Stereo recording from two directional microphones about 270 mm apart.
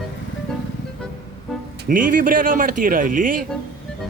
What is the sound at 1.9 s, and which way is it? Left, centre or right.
A man's voice, right.